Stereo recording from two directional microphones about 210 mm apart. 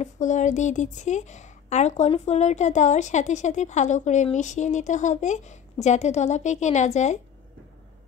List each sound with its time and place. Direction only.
0.0 s a woman's voice: 35° left (ahead or behind)